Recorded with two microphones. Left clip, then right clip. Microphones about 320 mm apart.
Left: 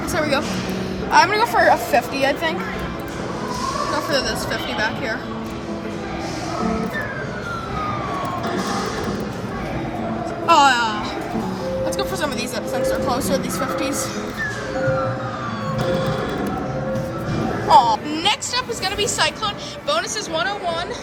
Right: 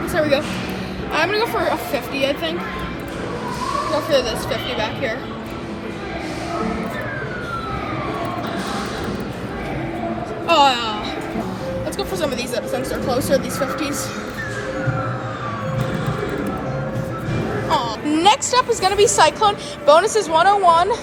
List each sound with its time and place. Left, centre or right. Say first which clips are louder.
0.1 s music: right 2 dB; left
1.1 s speech: left 4 dB; left
4.1 s speech: right 5 dB; left
10.4 s a sound: left 1 dB; left
12.7 s speech: left 3 dB; left
17.7 s a sound: left 8 dB; left
18.1 s a woman's voice: right 6 dB; centre